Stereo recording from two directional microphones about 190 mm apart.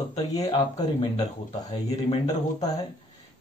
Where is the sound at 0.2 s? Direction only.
20° left (ahead or behind).